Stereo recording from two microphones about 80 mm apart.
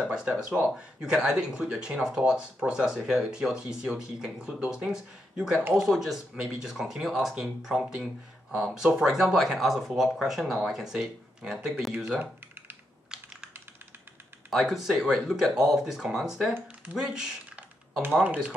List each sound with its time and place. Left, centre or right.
0.1 s speech: centre
11.9 s speech: right
14.5 s speech: centre
18.2 s speech: centre